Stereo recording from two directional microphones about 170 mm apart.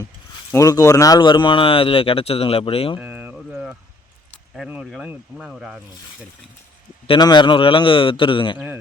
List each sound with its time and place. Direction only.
0.5 s speech: 20° left (ahead or behind)
3.0 s a sound: 10° right (ahead or behind)
4.5 s speech: 5° right (ahead or behind)
7.1 s a man's voice: 25° left (ahead or behind)
8.5 s speech: 10° right (ahead or behind)